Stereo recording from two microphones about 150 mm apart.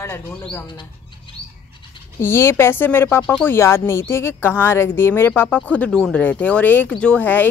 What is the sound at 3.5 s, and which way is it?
Speech, 15° left (ahead or behind).